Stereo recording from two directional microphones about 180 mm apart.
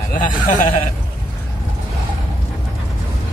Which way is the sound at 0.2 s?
45° left (ahead or behind).